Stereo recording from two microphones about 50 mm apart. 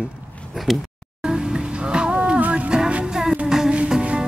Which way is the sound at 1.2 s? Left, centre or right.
Centre.